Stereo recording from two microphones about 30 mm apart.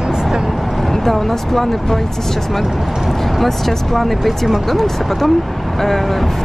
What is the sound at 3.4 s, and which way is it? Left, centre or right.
Speech, centre.